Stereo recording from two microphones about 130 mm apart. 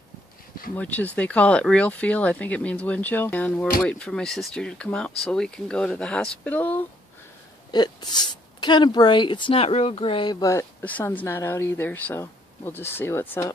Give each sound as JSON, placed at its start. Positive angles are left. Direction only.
{"t": 0.7, "sound": "speech", "side_deg": 10}
{"t": 7.7, "sound": "speech", "side_deg": 35}